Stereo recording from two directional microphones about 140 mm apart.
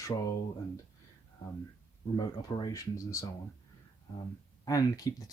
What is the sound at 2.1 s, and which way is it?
Speech, 30° left (ahead or behind).